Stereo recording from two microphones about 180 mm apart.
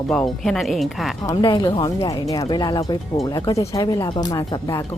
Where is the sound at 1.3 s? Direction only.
20° left (ahead or behind).